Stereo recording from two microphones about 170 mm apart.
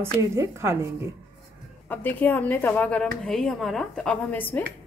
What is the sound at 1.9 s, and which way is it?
A woman's voice, 10° left (ahead or behind).